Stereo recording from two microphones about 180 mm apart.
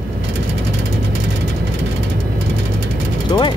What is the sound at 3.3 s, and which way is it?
Speech, 25° left (ahead or behind).